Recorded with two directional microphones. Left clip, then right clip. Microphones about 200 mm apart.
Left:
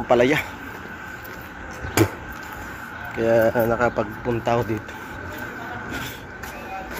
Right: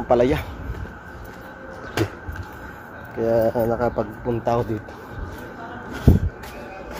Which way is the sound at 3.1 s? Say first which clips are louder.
Left 1 dB; 10° right (ahead or behind).